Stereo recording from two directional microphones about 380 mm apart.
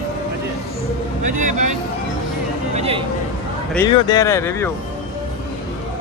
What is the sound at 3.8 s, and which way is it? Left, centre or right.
Speech, centre.